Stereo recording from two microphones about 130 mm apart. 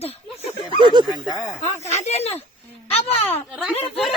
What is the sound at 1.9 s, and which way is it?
Speech, 55° left (ahead or behind).